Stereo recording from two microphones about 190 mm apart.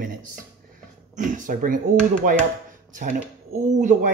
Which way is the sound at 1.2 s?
45° right (ahead or behind).